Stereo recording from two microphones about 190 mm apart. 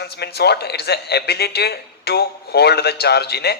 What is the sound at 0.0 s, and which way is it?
A man's voice, 60° left (ahead or behind).